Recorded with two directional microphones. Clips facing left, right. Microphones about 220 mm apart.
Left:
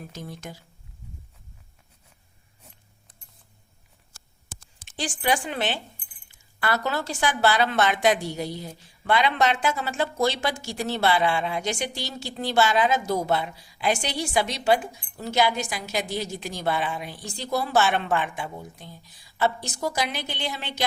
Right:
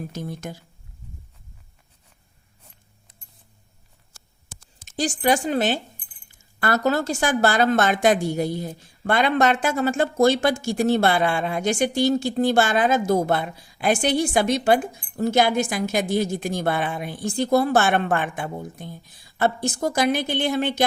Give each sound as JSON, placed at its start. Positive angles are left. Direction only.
{"t": 0.1, "sound": "speech", "side_deg": -50}
{"t": 4.9, "sound": "speech", "side_deg": -40}